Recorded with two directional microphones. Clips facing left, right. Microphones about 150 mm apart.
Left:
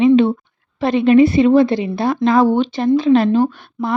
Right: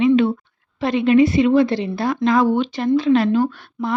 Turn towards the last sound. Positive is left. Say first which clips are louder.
# left 3 dB
turn(degrees=20)  # may be behind; listen again after turning